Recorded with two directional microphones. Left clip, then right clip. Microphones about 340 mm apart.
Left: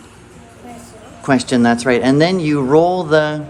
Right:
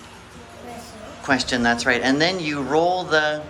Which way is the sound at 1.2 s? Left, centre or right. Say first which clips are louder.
Left 5 dB; centre.